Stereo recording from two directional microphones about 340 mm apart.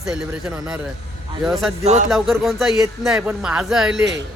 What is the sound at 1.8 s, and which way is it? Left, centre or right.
Speech, centre.